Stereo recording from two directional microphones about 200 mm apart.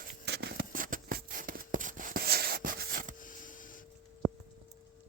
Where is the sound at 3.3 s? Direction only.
40° left (ahead or behind).